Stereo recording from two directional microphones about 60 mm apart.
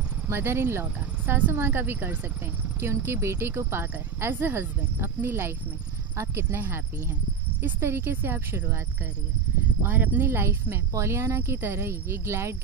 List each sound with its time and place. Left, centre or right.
0.3 s speech: right
9.8 s speech: right